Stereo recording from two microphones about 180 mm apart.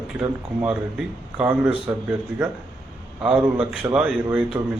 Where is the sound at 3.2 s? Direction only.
5° right (ahead or behind).